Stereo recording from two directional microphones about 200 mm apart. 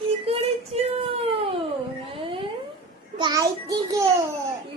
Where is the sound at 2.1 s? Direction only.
25° right (ahead or behind).